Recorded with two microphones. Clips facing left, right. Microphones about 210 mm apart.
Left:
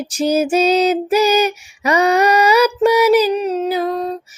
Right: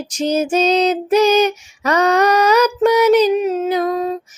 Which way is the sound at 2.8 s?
10° left (ahead or behind).